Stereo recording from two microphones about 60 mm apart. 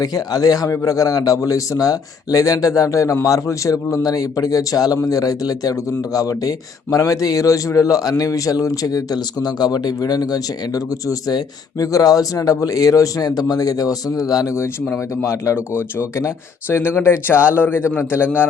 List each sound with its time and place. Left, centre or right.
0.0 s a man's voice: left
14.9 s a man's voice: left